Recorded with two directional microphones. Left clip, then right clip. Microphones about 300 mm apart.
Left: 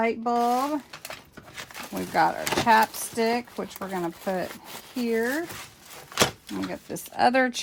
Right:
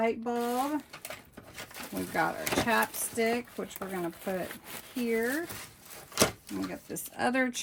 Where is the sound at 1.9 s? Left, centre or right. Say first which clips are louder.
Left 7 dB; left.